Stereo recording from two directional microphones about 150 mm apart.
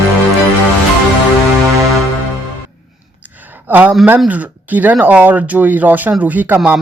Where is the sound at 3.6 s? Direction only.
10° right (ahead or behind).